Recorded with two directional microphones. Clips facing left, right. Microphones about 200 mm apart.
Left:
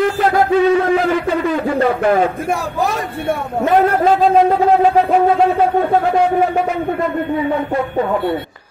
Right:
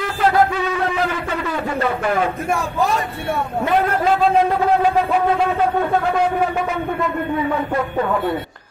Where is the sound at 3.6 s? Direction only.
45° left (ahead or behind).